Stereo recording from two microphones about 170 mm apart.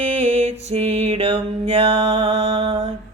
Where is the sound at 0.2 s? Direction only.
40° right (ahead or behind).